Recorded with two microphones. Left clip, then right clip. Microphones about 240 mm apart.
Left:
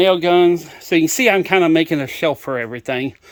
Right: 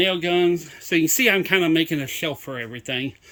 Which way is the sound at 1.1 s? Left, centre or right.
Centre.